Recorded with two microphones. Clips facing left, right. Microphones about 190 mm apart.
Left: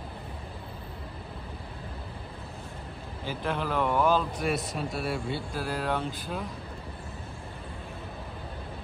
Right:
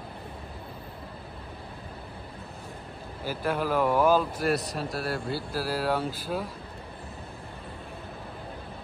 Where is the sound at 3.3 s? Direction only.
5° right (ahead or behind).